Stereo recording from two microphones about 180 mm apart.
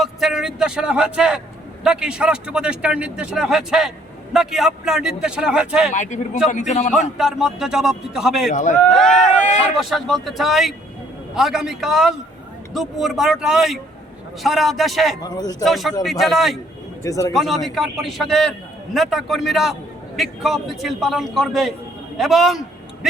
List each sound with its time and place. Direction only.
0.0 s a man's voice: centre (ahead or behind)
5.9 s a man's voice: 45° left (ahead or behind)
7.2 s a man's voice: centre (ahead or behind)
8.4 s a man's voice: 45° left (ahead or behind)
8.9 s a man's voice: 5° left (ahead or behind)
15.2 s speech: 20° left (ahead or behind)
15.6 s a man's voice: centre (ahead or behind)
17.0 s a man's voice: 20° left (ahead or behind)
17.3 s a man's voice: centre (ahead or behind)